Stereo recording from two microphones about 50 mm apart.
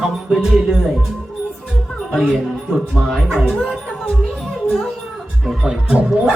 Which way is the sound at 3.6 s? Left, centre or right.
Centre.